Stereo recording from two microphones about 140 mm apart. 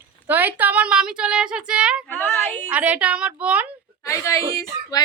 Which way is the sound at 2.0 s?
5° left (ahead or behind).